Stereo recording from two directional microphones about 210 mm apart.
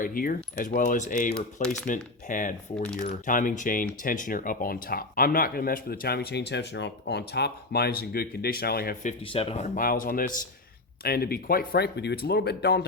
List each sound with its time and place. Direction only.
0.0 s speech: 45° left (ahead or behind)
9.2 s speech: 25° left (ahead or behind); by 12.8 s 50° left (ahead or behind)